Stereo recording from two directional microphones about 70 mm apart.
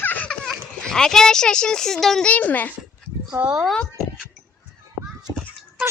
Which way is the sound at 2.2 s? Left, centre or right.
Left.